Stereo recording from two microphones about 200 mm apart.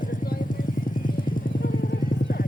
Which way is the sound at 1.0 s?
45° left (ahead or behind).